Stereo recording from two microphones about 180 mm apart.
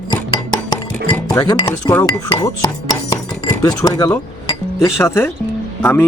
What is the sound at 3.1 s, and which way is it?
Chink, 20° left (ahead or behind).